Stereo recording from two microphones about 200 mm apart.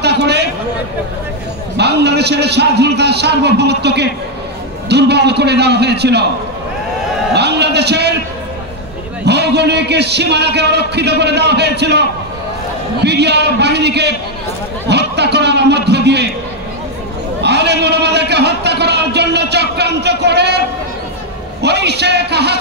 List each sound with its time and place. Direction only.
0.0 s a sound: 55° right (ahead or behind)
1.8 s a man's voice: 55° right (ahead or behind)
7.3 s a man's voice: 55° right (ahead or behind)
9.2 s a man's voice: 55° right (ahead or behind)
13.0 s a man's voice: 55° right (ahead or behind)
14.9 s a sound: 55° right (ahead or behind)
17.4 s a man's voice: 55° right (ahead or behind)
21.6 s a man's voice: 55° right (ahead or behind)